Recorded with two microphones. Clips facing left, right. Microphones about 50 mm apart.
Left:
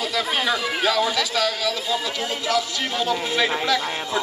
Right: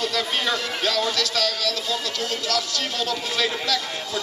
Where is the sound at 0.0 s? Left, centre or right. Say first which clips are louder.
Left 1 dB; centre.